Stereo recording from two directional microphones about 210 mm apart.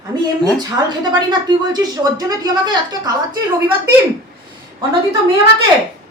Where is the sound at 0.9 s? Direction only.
20° right (ahead or behind).